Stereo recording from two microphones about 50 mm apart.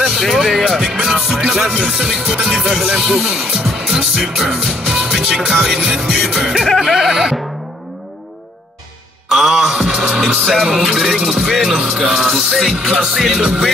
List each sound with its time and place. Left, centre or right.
0.1 s speech: centre
1.4 s music: centre
1.9 s speech: centre
2.8 s music: centre
3.1 s speech: centre
3.6 s music: centre
6.2 s speech: centre
9.3 s music: centre
10.4 s speech: centre
10.8 s music: centre
12.8 s music: centre